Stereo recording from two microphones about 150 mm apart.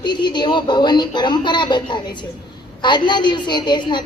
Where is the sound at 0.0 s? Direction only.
30° left (ahead or behind).